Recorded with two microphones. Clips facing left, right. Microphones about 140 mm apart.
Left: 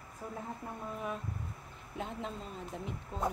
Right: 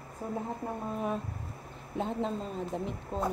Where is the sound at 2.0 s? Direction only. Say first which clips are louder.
Right 8 dB; 35° right (ahead or behind).